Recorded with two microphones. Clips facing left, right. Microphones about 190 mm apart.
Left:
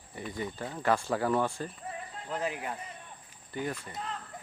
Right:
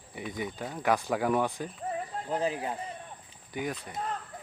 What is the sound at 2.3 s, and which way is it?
Speech, 30° right (ahead or behind).